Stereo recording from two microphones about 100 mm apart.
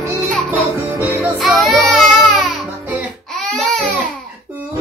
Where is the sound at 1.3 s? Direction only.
Centre (ahead or behind).